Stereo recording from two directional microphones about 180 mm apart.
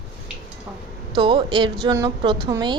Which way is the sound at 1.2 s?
25° right (ahead or behind).